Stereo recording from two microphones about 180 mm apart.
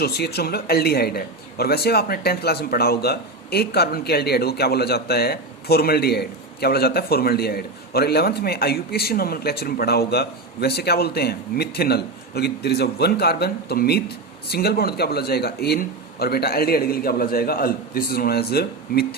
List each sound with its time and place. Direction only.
0.0 s a man's voice: 65° left (ahead or behind)